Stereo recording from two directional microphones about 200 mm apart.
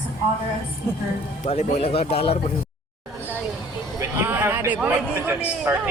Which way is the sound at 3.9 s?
10° right (ahead or behind).